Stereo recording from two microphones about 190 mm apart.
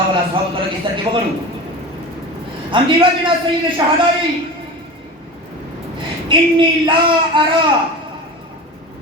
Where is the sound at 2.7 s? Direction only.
25° right (ahead or behind).